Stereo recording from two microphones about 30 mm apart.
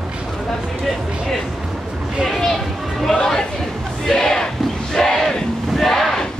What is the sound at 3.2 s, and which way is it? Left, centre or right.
Chatter, left.